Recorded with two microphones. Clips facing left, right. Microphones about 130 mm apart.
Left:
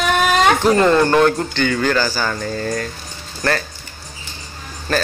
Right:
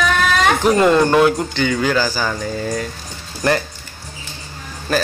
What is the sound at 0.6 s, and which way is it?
Speech, 10° right (ahead or behind).